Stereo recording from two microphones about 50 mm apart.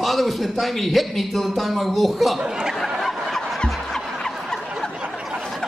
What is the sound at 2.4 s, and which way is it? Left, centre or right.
Speech, centre.